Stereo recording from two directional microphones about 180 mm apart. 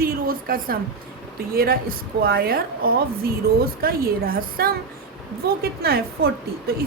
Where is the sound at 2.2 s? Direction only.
55° right (ahead or behind).